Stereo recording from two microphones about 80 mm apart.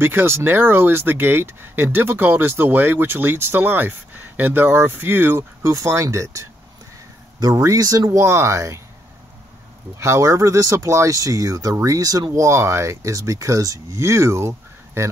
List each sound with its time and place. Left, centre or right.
0.0 s speech: right
8.2 s speech: right
9.9 s speech: right